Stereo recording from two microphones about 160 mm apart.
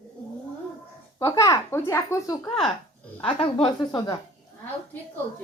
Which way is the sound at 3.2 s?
30° left (ahead or behind).